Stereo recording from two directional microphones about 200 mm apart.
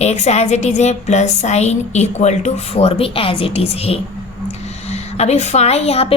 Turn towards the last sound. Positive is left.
turn(degrees=30)  # may be behind; listen again after turning